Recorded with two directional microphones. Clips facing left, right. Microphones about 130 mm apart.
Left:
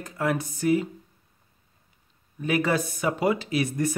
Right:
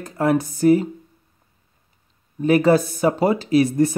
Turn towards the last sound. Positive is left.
turn(degrees=-30)  # may be behind; listen again after turning